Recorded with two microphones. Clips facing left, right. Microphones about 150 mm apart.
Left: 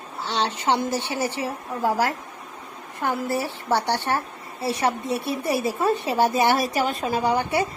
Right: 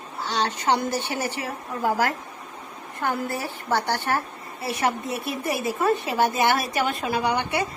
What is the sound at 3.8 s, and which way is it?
A woman's voice, 30° left (ahead or behind).